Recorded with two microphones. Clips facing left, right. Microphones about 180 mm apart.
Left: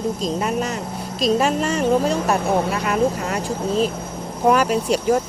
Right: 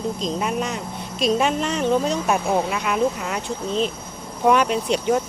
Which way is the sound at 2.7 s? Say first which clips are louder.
Left 2 dB; 50° left (ahead or behind).